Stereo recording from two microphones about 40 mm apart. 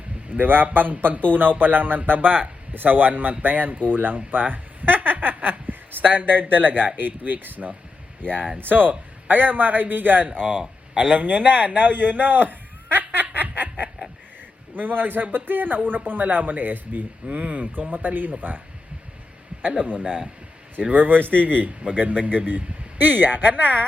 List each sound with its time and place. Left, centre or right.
0.3 s a man's voice: right
10.3 s a man's voice: right
13.1 s a sound: right
14.8 s a man's voice: right
19.7 s a man's voice: right